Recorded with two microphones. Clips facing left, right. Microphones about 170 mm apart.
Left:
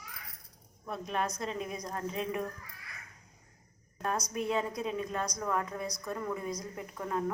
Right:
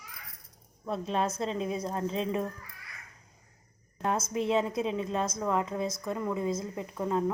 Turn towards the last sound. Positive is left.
turn(degrees=-25)  # may be behind; listen again after turning